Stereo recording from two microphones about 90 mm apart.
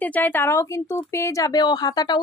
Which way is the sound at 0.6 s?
30° left (ahead or behind).